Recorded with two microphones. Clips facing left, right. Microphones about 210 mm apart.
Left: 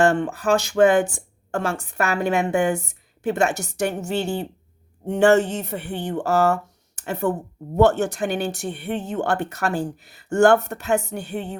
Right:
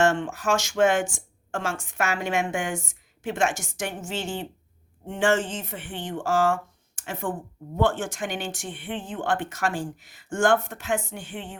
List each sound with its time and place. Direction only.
0.0 s speech: 35° left (ahead or behind)